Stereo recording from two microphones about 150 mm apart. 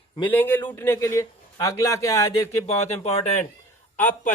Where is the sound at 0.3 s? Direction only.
10° left (ahead or behind).